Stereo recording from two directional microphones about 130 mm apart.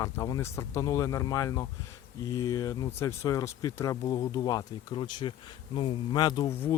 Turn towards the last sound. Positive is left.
turn(degrees=15)  # may be behind; listen again after turning